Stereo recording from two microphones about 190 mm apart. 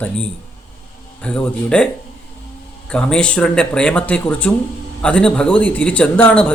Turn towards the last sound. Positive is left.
turn(degrees=5)  # may be behind; listen again after turning